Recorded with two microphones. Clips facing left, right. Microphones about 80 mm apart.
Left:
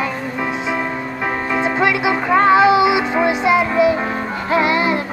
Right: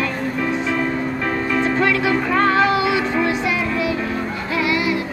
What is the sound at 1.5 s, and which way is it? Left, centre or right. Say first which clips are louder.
Music: left 1 dB; centre.